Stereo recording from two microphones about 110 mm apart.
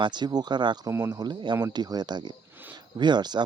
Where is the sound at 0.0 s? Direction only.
40° right (ahead or behind).